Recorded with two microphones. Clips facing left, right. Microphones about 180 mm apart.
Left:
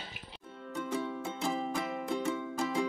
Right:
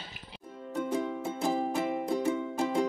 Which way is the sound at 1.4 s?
35° right (ahead or behind).